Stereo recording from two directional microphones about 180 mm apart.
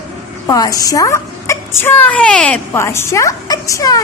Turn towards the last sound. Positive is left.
turn(degrees=20)  # may be behind; listen again after turning